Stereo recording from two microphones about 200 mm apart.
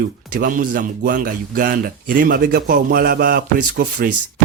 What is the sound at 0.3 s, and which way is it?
A man's voice, 45° right (ahead or behind).